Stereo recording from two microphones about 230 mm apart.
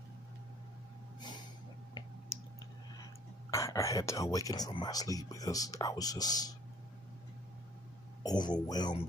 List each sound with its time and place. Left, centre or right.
3.4 s speech: centre
8.2 s speech: centre